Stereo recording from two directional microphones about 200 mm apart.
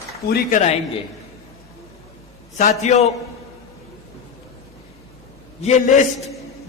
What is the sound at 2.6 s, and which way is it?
Speech, 35° left (ahead or behind).